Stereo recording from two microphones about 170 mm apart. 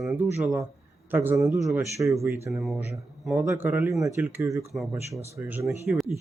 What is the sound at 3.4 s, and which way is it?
Speech, 15° right (ahead or behind).